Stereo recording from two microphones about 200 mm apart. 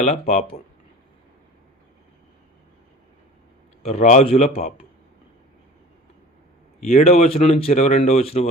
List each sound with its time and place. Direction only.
0.0 s speech: 35° left (ahead or behind)
3.8 s speech: 35° left (ahead or behind)
6.7 s speech: 35° left (ahead or behind)